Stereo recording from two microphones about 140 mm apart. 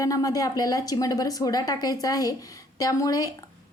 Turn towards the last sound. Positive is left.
turn(degrees=25)  # may be behind; listen again after turning